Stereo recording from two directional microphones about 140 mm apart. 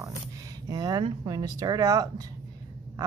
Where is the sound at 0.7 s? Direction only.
30° right (ahead or behind).